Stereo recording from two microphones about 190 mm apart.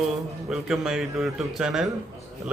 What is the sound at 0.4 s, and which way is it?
Speech, centre (ahead or behind).